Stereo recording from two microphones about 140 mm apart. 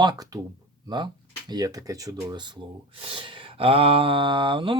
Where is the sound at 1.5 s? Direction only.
25° right (ahead or behind).